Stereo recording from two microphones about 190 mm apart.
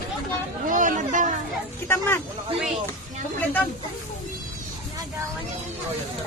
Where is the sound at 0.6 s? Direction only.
45° right (ahead or behind).